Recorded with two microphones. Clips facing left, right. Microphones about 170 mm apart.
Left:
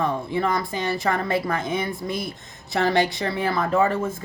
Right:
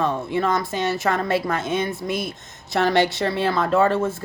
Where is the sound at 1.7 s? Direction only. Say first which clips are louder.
Right 2 dB; 25° right (ahead or behind).